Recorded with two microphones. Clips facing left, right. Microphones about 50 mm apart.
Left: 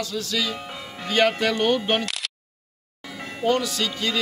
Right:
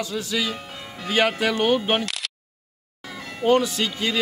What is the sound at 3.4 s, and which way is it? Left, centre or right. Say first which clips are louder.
Speech: right 3 dB; right.